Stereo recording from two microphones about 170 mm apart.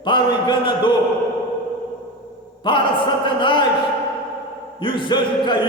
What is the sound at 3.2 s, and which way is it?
Speech, 30° left (ahead or behind).